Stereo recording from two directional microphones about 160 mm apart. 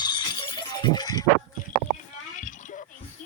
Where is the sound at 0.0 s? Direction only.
25° left (ahead or behind).